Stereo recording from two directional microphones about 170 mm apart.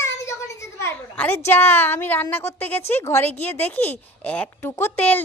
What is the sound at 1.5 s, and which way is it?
A woman's voice, 15° left (ahead or behind).